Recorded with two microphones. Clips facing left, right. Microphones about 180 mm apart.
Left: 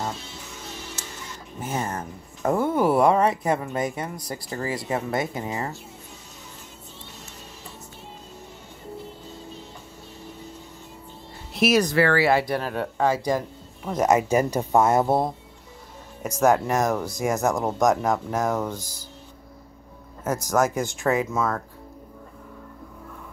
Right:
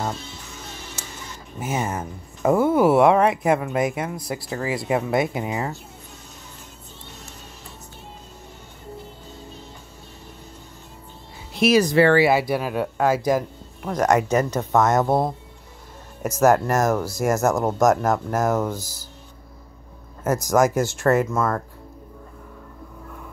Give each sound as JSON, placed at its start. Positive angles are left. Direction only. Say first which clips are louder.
{"t": 1.6, "sound": "speech", "louder": "right 3 dB", "side_deg": -5}
{"t": 11.5, "sound": "speech", "louder": "right 3 dB", "side_deg": 0}
{"t": 11.9, "sound": "speech", "louder": "right 5 dB", "side_deg": -20}
{"t": 12.3, "sound": "speech", "louder": "right 2 dB", "side_deg": -5}
{"t": 20.4, "sound": "speech", "louder": "right 4 dB", "side_deg": -10}